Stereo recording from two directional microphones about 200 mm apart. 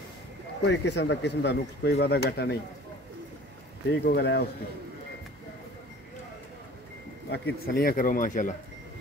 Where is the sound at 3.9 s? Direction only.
55° left (ahead or behind).